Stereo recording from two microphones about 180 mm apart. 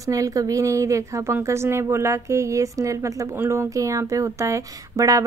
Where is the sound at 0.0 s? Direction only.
20° right (ahead or behind).